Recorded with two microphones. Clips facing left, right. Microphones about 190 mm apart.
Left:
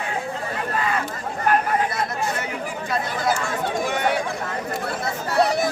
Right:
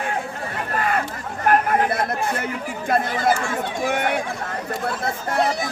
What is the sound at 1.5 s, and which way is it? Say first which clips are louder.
Chatter: right 3 dB; 55° right (ahead or behind).